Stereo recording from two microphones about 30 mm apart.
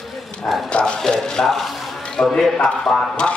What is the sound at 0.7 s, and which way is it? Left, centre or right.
Speech, left.